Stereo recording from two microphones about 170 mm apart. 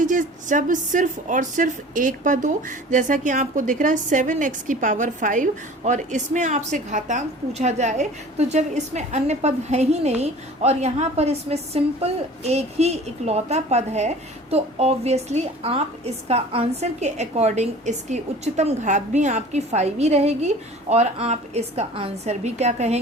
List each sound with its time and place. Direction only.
0.0 s a woman's voice: 50° right (ahead or behind)